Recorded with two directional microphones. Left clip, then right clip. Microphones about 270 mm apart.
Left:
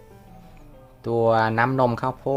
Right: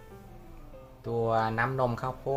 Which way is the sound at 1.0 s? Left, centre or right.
Left.